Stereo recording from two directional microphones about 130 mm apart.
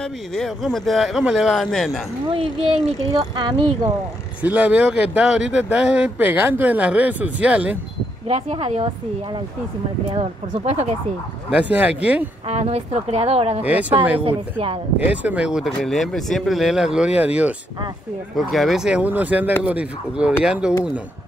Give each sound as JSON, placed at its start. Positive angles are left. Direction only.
{"t": 0.0, "sound": "speech", "side_deg": 5}
{"t": 2.3, "sound": "a woman's voice", "side_deg": -50}
{"t": 3.3, "sound": "speech", "side_deg": -35}
{"t": 4.4, "sound": "speech", "side_deg": -10}
{"t": 8.3, "sound": "a woman's voice", "side_deg": -50}
{"t": 11.5, "sound": "speech", "side_deg": -10}
{"t": 12.4, "sound": "a woman's voice", "side_deg": -50}
{"t": 13.6, "sound": "speech", "side_deg": -10}
{"t": 14.2, "sound": "a woman's voice", "side_deg": -45}
{"t": 15.0, "sound": "speech", "side_deg": -10}
{"t": 18.3, "sound": "speech", "side_deg": 0}